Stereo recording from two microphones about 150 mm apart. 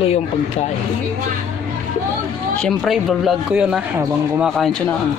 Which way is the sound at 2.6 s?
Centre (ahead or behind).